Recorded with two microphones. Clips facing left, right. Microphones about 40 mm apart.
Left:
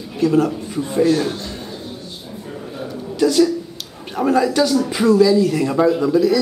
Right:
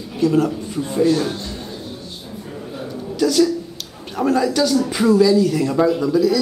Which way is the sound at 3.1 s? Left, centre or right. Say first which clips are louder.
Left 1 dB; centre.